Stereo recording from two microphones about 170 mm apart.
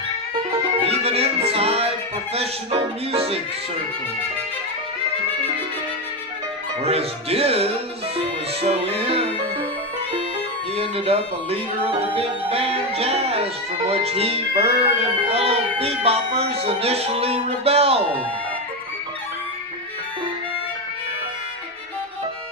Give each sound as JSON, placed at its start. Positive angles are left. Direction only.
{"t": 0.8, "sound": "music", "side_deg": -35}
{"t": 2.3, "sound": "speech", "side_deg": -35}
{"t": 6.8, "sound": "speech", "side_deg": -35}
{"t": 8.6, "sound": "music", "side_deg": -35}
{"t": 10.8, "sound": "speech", "side_deg": -35}